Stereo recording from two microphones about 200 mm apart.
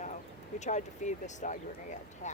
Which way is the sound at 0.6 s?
35° left (ahead or behind).